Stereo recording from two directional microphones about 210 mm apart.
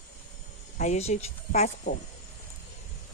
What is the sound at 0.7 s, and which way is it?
A woman's voice, 30° left (ahead or behind).